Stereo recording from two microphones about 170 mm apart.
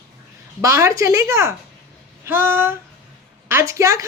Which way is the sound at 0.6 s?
15° right (ahead or behind).